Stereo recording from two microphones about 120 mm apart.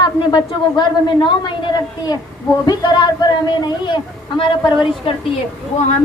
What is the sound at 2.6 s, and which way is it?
A woman's voice, 35° left (ahead or behind).